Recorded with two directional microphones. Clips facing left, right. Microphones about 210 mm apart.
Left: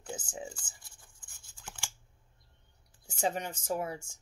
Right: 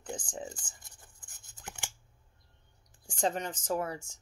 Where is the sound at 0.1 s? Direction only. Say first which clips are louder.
Right 1 dB; 10° left (ahead or behind).